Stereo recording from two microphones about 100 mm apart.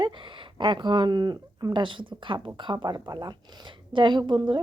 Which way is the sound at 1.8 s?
55° right (ahead or behind).